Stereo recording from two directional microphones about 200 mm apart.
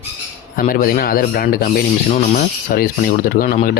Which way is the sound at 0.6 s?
45° left (ahead or behind).